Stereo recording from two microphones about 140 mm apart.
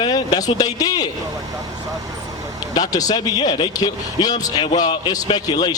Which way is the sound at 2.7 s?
25° left (ahead or behind).